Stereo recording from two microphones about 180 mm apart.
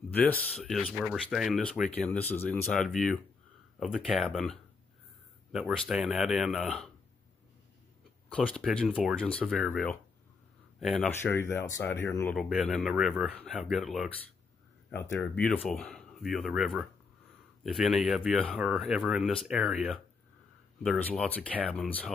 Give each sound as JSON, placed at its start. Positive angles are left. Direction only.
{"t": 0.1, "sound": "speech", "side_deg": 10}
{"t": 8.3, "sound": "speech", "side_deg": 5}
{"t": 8.8, "sound": "speech", "side_deg": -5}
{"t": 9.1, "sound": "speech", "side_deg": 5}
{"t": 11.1, "sound": "speech", "side_deg": 15}
{"t": 12.4, "sound": "speech", "side_deg": 0}
{"t": 14.9, "sound": "speech", "side_deg": 15}